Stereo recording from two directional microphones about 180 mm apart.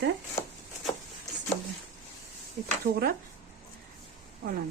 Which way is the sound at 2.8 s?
55° right (ahead or behind).